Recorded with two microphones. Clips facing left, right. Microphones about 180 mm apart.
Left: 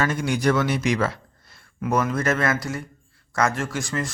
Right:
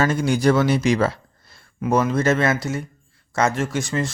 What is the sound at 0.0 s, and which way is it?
A man's voice, 30° right (ahead or behind).